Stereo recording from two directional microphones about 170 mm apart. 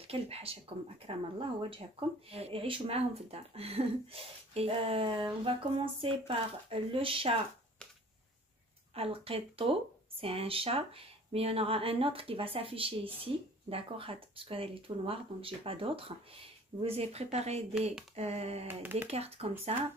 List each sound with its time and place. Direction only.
0.0 s speech: 35° right (ahead or behind)
8.9 s speech: 35° right (ahead or behind)
18.7 s speech: 10° right (ahead or behind)
19.0 s speech: 35° right (ahead or behind)